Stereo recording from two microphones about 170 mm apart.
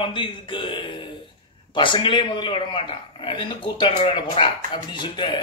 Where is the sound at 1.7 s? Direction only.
30° left (ahead or behind).